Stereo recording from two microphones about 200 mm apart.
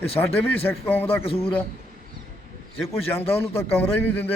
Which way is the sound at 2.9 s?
10° left (ahead or behind).